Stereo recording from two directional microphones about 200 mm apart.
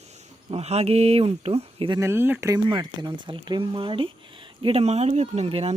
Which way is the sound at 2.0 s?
10° right (ahead or behind).